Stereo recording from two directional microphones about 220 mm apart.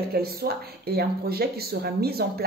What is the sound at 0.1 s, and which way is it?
Speech, 45° right (ahead or behind).